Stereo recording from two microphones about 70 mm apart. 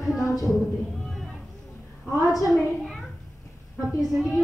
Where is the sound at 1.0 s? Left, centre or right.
Centre.